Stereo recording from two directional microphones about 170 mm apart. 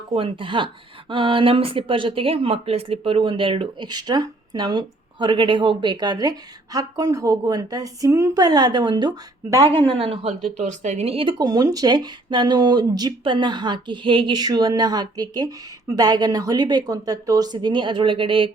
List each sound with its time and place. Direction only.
0.1 s speech: 30° right (ahead or behind)
9.6 s speech: 35° right (ahead or behind)